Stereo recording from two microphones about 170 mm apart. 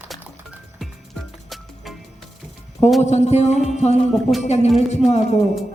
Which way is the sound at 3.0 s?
40° left (ahead or behind).